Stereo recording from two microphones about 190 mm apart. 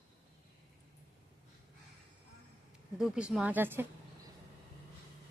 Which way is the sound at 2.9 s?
5° right (ahead or behind).